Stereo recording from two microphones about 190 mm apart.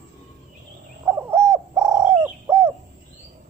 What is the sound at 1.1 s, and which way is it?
Bird, 15° right (ahead or behind).